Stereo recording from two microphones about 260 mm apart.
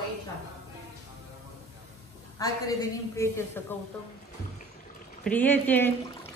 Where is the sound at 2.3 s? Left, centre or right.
Centre.